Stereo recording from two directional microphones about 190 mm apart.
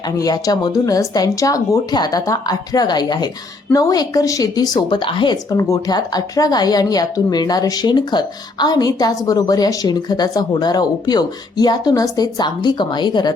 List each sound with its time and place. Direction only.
0.2 s speech: 20° left (ahead or behind)